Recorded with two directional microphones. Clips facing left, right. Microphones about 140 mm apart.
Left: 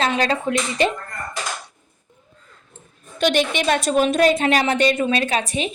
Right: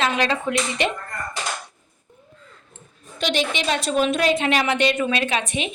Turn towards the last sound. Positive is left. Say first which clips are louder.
# left 2 dB
turn(degrees=35)  # may be behind; listen again after turning